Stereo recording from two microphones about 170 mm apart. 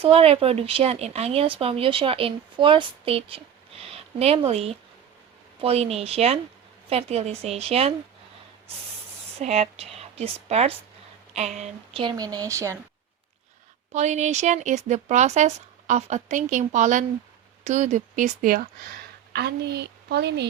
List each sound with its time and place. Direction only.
0.0 s speech: 35° right (ahead or behind)
9.4 s a woman's voice: 40° right (ahead or behind)
12.0 s speech: 20° right (ahead or behind)
13.9 s speech: 45° right (ahead or behind)
19.3 s a woman's voice: 75° right (ahead or behind)